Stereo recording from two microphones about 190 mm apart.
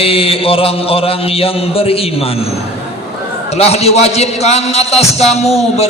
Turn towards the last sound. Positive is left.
turn(degrees=35)  # may be behind; listen again after turning